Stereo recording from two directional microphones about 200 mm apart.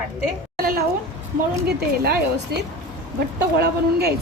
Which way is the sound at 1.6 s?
55° right (ahead or behind).